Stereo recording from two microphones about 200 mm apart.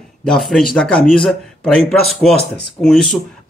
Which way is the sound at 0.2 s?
Centre (ahead or behind).